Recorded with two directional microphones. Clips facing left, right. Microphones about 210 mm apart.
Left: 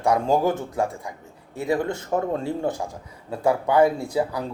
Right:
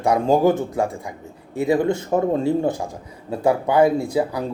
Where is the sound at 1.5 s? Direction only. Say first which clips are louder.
Right 5 dB; 15° right (ahead or behind).